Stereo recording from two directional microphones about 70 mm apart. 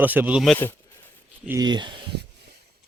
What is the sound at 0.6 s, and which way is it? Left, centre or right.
Speech, left.